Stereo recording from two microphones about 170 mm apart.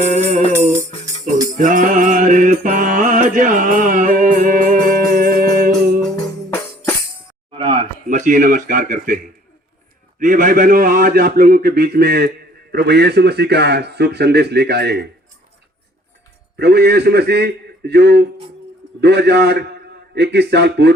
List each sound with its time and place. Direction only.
0.0 s music: 45° right (ahead or behind)
1.5 s mantra: 50° right (ahead or behind)
6.5 s music: 15° left (ahead or behind)
7.5 s a sound: 30° right (ahead or behind)
8.0 s speech: 50° right (ahead or behind)
10.2 s a man's voice: 50° right (ahead or behind); by 15.0 s 75° right (ahead or behind)
16.6 s a man's voice: 75° right (ahead or behind)